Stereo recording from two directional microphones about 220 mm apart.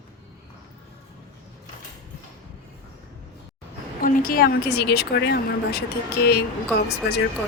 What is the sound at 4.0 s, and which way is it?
A woman's voice, 40° left (ahead or behind).